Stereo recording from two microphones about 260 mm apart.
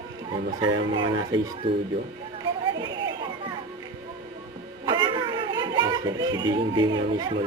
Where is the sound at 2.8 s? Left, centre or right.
Centre.